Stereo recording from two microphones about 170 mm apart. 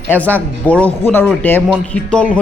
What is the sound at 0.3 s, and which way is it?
Speech, 10° left (ahead or behind).